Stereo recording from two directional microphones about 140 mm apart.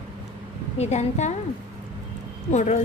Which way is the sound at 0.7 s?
50° left (ahead or behind).